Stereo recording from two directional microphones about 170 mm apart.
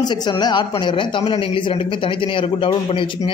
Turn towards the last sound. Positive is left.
turn(degrees=30)  # may be behind; listen again after turning